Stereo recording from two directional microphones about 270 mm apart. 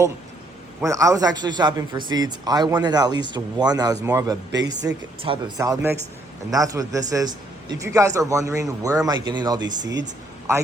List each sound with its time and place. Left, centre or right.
0.8 s a man's voice: centre
9.8 s speech: right